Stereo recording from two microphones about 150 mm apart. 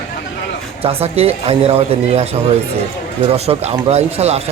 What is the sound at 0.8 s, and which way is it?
Speech, 45° right (ahead or behind).